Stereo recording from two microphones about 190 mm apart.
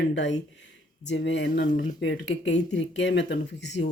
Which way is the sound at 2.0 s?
70° left (ahead or behind).